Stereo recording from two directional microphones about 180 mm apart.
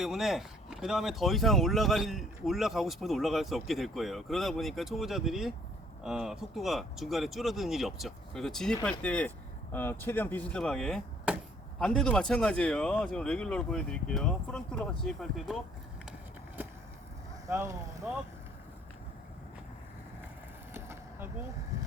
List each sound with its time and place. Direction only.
0.0 s speech: centre (ahead or behind)
17.4 s speech: 15° right (ahead or behind)
20.7 s a sound: 15° right (ahead or behind)